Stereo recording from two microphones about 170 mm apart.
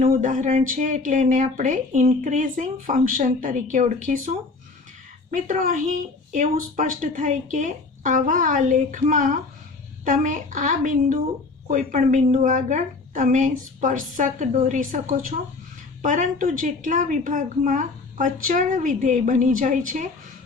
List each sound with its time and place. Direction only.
0.0 s speech: 45° right (ahead or behind)